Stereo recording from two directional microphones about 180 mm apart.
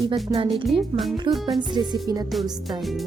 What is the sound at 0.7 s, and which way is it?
Speech, centre (ahead or behind).